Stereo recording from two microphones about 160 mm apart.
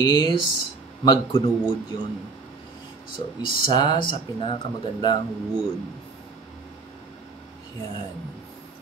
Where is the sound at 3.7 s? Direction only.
25° left (ahead or behind).